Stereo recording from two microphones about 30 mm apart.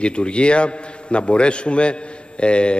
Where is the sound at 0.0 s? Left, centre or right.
Left.